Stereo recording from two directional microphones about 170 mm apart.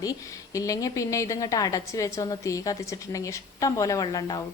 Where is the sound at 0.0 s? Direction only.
20° left (ahead or behind).